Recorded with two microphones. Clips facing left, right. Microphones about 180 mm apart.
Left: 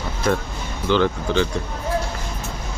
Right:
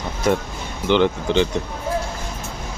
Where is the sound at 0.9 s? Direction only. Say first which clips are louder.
Right 2 dB; 20° right (ahead or behind).